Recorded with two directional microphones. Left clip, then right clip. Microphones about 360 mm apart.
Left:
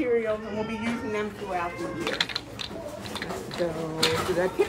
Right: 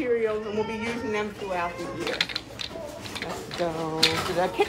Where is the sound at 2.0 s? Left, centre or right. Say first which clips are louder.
Right 1 dB; centre.